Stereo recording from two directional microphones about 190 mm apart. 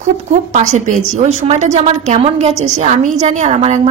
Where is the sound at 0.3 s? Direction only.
40° right (ahead or behind).